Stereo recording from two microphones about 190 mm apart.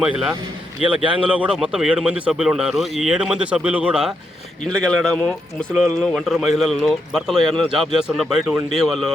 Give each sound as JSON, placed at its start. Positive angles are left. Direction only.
{"t": 0.0, "sound": "a man's voice", "side_deg": -5}
{"t": 1.0, "sound": "speech", "side_deg": -25}
{"t": 1.3, "sound": "a man's voice", "side_deg": -5}